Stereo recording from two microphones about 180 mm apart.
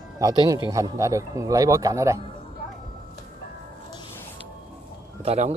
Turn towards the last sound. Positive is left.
turn(degrees=-35)  # may be behind; listen again after turning